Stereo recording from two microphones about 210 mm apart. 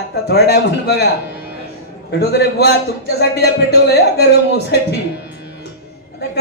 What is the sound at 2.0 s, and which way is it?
Speech, 50° left (ahead or behind).